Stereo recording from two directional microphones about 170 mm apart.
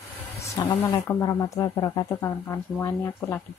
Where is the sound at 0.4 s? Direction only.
20° left (ahead or behind).